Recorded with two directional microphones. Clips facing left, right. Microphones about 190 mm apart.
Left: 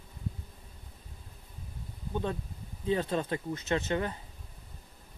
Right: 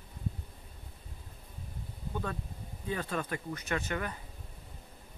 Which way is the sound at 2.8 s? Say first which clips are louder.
Left 6 dB; 25° left (ahead or behind).